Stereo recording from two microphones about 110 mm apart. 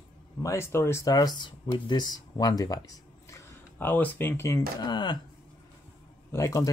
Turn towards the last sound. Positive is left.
turn(degrees=30)  # may be behind; listen again after turning